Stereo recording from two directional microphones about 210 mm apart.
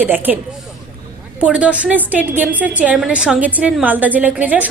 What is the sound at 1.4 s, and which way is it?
A woman's voice, 5° right (ahead or behind).